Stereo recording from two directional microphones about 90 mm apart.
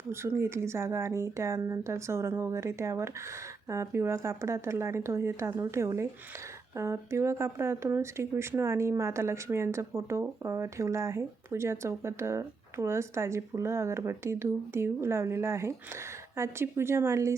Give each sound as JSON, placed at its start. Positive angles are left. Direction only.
{"t": 0.1, "sound": "speech", "side_deg": -30}